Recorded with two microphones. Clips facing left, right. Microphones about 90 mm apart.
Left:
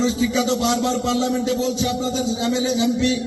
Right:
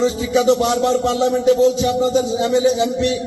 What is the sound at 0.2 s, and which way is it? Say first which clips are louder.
Speech: right 5 dB; 25° right (ahead or behind).